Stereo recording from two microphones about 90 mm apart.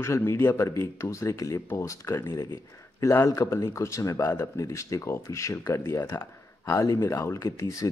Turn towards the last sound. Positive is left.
turn(degrees=35)  # may be behind; listen again after turning